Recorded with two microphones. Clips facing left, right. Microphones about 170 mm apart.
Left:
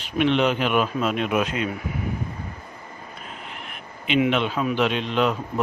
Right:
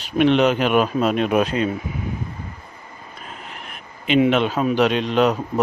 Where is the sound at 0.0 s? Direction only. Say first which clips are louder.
Right 4 dB; 40° right (ahead or behind).